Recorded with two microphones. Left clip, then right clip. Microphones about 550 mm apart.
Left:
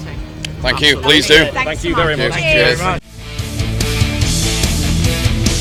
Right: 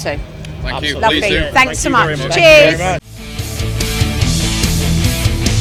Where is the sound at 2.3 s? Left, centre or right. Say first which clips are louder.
Right 10 dB; right.